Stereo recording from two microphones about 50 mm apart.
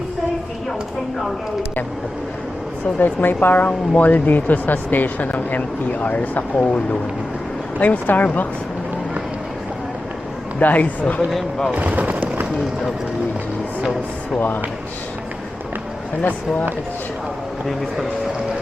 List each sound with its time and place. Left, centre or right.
3.0 s speech: left
7.8 s speech: left
10.6 s speech: left
11.3 s speech: centre
11.7 s a sound: right
14.3 s speech: left